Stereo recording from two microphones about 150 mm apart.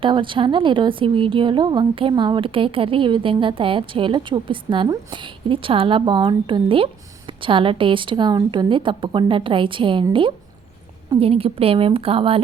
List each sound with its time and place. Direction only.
0.0 s a woman's voice: 35° right (ahead or behind)